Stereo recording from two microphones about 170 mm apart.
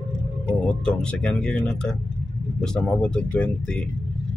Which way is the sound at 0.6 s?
5° left (ahead or behind).